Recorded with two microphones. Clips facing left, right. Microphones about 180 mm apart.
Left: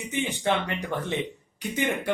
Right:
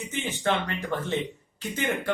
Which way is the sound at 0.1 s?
15° left (ahead or behind).